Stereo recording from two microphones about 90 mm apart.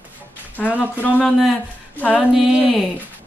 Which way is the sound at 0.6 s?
20° left (ahead or behind).